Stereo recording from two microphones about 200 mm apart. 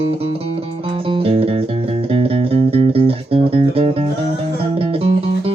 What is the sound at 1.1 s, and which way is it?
Music, 30° right (ahead or behind).